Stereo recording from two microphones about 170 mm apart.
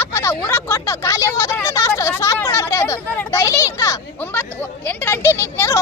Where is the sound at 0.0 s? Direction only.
15° left (ahead or behind).